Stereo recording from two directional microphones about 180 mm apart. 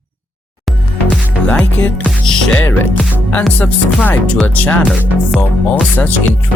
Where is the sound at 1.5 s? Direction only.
10° left (ahead or behind).